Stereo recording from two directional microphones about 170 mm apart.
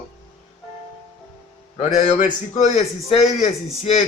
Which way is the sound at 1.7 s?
40° left (ahead or behind).